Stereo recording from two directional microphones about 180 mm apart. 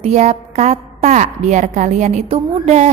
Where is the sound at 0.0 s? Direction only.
35° right (ahead or behind).